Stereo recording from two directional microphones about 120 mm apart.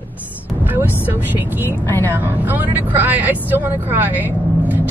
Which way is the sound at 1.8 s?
15° left (ahead or behind).